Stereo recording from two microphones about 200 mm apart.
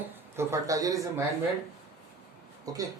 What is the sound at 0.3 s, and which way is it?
Speech, 15° right (ahead or behind).